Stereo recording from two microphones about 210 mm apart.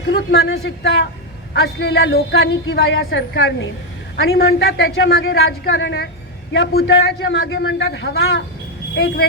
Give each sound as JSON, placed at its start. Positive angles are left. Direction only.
{"t": 0.1, "sound": "a man's voice", "side_deg": 50}